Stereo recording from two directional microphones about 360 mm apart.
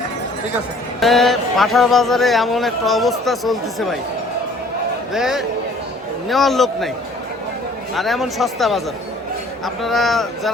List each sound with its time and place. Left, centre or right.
0.9 s speech: centre
5.1 s speech: centre
7.9 s speech: centre